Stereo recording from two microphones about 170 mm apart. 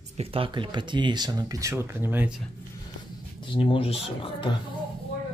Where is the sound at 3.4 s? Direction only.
30° left (ahead or behind).